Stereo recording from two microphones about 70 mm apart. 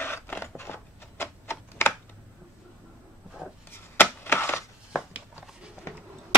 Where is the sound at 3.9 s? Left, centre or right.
Left.